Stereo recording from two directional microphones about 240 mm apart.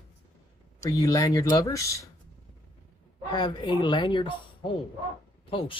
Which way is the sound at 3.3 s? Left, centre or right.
Centre.